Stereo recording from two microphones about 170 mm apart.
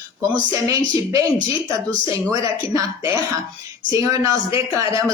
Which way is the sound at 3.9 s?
20° right (ahead or behind).